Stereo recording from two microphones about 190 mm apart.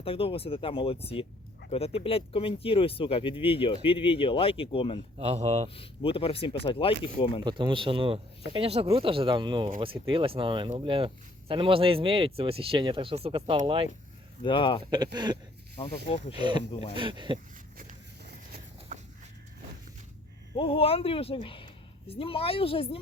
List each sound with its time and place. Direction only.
0.0 s speech: 30° left (ahead or behind)
5.1 s speech: 35° right (ahead or behind)
5.7 s speech: 30° left (ahead or behind)
7.4 s speech: 25° right (ahead or behind)
14.4 s speech: 25° left (ahead or behind)
14.8 s speech: 20° right (ahead or behind)
16.0 s speech: 35° left (ahead or behind)
16.3 s speech: 25° right (ahead or behind)
20.6 s speech: 30° left (ahead or behind)